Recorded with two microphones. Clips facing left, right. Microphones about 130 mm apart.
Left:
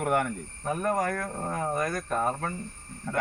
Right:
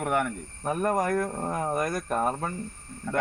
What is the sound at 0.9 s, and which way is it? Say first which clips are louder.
Speech: right 3 dB; 15° right (ahead or behind).